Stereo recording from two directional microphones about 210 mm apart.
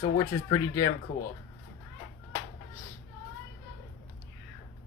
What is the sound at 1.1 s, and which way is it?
Speech, 50° left (ahead or behind).